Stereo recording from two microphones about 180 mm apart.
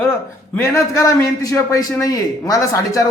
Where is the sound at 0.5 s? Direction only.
15° left (ahead or behind).